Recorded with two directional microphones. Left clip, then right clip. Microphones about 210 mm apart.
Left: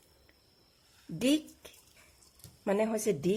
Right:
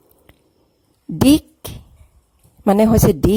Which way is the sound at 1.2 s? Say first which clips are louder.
Right 15 dB; 45° right (ahead or behind).